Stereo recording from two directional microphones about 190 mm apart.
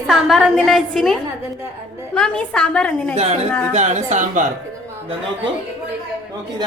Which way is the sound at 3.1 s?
35° right (ahead or behind).